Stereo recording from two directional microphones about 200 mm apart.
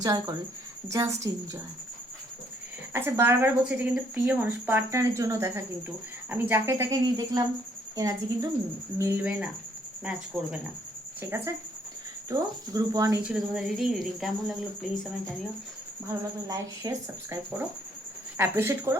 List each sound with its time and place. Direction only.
0.0 s speech: 15° right (ahead or behind)
2.9 s speech: 10° right (ahead or behind)
13.2 s speech: 5° right (ahead or behind)
16.5 s speech: 15° right (ahead or behind)